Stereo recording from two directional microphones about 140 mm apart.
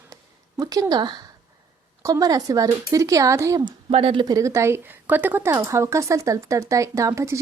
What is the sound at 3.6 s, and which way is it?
Speech, 40° right (ahead or behind).